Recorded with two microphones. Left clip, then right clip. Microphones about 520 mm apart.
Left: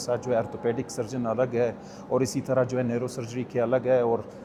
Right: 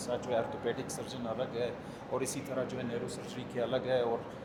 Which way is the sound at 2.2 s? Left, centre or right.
Left.